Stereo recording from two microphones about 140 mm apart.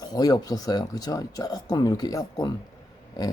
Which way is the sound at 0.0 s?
25° left (ahead or behind).